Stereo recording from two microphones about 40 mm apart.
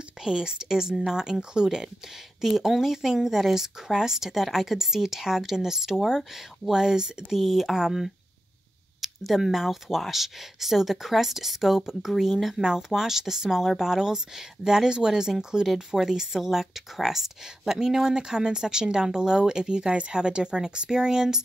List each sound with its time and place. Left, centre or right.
0.2 s speech: centre